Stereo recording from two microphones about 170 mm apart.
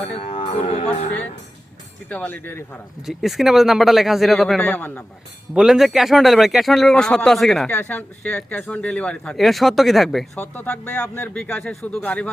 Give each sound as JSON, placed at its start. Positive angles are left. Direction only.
{"t": 0.0, "sound": "speech", "side_deg": 35}
{"t": 2.0, "sound": "speech", "side_deg": 10}
{"t": 3.1, "sound": "a man's voice", "side_deg": 0}
{"t": 5.5, "sound": "a man's voice", "side_deg": 0}